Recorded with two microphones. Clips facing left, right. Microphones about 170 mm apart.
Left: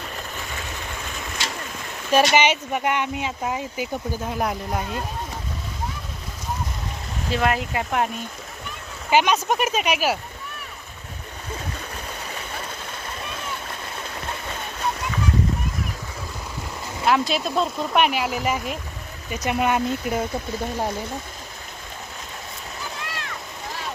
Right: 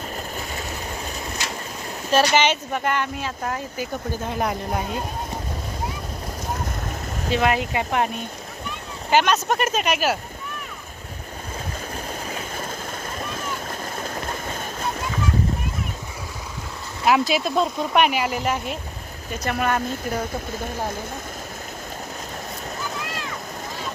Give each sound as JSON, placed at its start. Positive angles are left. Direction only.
{"t": 0.3, "sound": "vehicle", "side_deg": -40}
{"t": 2.1, "sound": "speech", "side_deg": 15}
{"t": 7.3, "sound": "speech", "side_deg": 0}
{"t": 13.3, "sound": "splash", "side_deg": -40}
{"t": 17.1, "sound": "speech", "side_deg": -5}
{"t": 19.5, "sound": "speech", "side_deg": 15}